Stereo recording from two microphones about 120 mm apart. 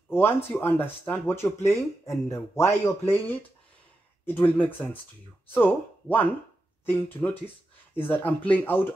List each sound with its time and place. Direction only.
0.1 s speech: 20° left (ahead or behind)